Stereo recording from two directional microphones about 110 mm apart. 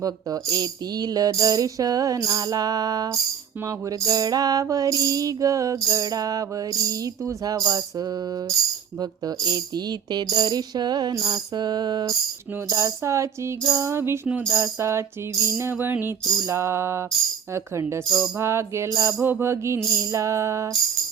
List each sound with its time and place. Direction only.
0.0 s music: 35° right (ahead or behind)